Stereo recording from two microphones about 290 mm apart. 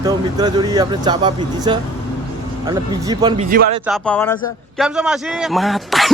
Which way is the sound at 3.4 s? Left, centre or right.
Right.